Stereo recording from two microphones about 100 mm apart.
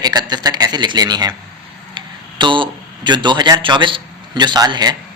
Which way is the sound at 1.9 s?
55° right (ahead or behind).